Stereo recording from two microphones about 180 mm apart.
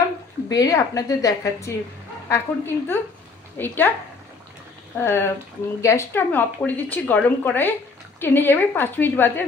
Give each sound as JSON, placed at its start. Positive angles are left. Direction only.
{"t": 0.5, "sound": "a woman's voice", "side_deg": 20}
{"t": 5.0, "sound": "speech", "side_deg": 15}